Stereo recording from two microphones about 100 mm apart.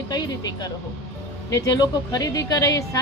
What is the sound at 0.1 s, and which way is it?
A woman's voice, 45° left (ahead or behind).